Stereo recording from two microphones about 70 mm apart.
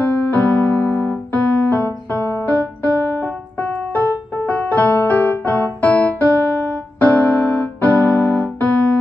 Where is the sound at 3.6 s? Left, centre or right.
Left.